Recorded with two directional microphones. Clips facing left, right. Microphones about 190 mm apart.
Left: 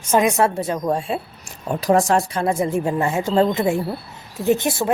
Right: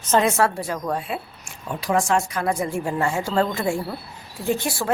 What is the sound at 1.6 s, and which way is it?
Speech, 40° left (ahead or behind).